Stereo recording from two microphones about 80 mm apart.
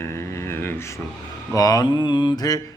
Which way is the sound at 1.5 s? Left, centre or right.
Left.